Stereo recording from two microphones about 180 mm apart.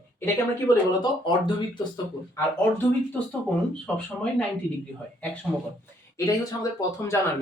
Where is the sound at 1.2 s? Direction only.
25° left (ahead or behind).